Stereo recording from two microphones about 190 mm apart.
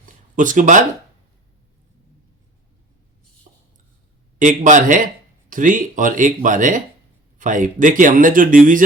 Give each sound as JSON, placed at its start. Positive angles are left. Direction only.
{"t": 0.3, "sound": "speech", "side_deg": -45}
{"t": 3.5, "sound": "a sound", "side_deg": -45}
{"t": 4.4, "sound": "speech", "side_deg": -40}